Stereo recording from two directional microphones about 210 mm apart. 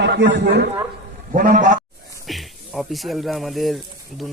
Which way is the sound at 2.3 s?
Centre (ahead or behind).